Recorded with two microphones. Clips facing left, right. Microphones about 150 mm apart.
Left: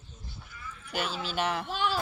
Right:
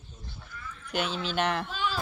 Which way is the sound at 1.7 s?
70° left (ahead or behind).